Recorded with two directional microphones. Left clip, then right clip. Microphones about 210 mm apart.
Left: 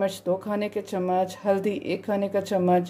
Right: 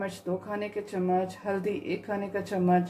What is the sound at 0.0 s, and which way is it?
Speech, 45° left (ahead or behind).